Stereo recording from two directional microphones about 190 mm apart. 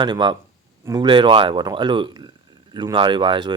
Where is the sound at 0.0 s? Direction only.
25° right (ahead or behind).